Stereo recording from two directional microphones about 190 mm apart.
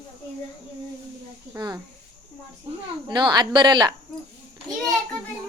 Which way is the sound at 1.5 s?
20° right (ahead or behind).